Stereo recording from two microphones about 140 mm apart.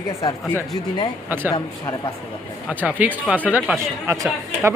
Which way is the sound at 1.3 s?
15° right (ahead or behind).